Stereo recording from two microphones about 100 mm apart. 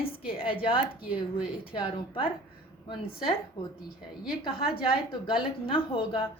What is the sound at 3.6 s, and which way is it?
A woman's voice, 60° left (ahead or behind).